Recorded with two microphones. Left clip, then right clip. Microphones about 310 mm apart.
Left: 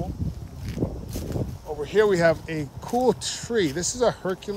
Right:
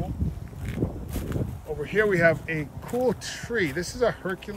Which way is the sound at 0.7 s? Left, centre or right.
Centre.